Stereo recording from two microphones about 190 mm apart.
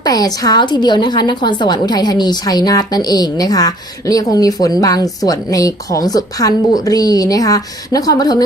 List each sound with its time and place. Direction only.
0.0 s a woman's voice: 20° left (ahead or behind)